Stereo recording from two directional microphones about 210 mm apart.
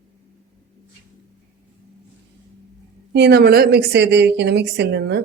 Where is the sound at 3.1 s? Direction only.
50° right (ahead or behind).